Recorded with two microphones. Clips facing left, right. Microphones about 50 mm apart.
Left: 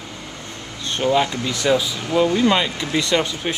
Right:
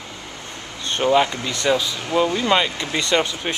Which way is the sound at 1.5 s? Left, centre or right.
Centre.